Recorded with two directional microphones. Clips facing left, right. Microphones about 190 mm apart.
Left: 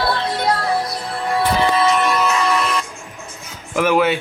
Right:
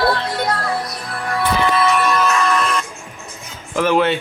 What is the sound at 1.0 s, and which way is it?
Music, 25° left (ahead or behind).